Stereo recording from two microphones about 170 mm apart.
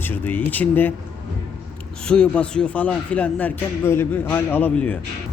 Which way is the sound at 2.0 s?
5° left (ahead or behind).